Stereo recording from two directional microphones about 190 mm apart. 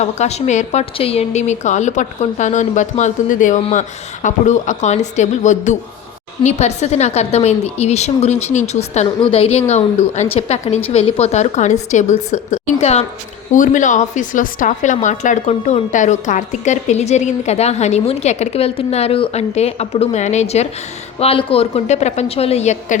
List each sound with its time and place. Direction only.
0.0 s a woman's voice: 35° left (ahead or behind)